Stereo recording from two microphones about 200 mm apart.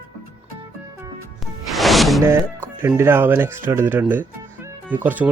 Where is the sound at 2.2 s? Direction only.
10° right (ahead or behind).